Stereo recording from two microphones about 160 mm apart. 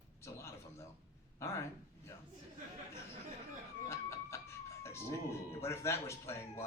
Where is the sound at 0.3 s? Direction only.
15° left (ahead or behind).